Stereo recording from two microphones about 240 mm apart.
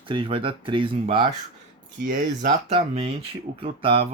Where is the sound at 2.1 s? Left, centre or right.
Right.